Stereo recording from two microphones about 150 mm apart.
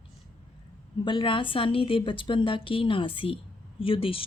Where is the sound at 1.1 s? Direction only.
35° left (ahead or behind).